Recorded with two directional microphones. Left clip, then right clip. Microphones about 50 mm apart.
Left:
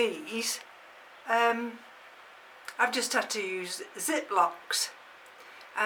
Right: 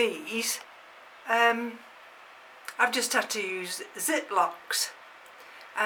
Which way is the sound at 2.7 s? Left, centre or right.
Centre.